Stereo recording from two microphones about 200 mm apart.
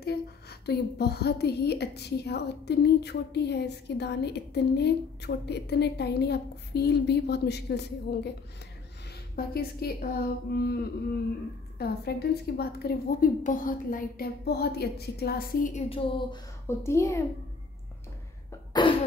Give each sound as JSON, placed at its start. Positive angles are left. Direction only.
{"t": 0.0, "sound": "a woman's voice", "side_deg": 55}
{"t": 9.3, "sound": "a woman's voice", "side_deg": 50}
{"t": 16.6, "sound": "a woman's voice", "side_deg": 15}
{"t": 18.7, "sound": "cough", "side_deg": 25}